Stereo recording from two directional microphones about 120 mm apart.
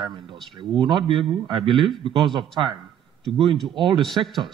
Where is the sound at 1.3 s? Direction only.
45° right (ahead or behind).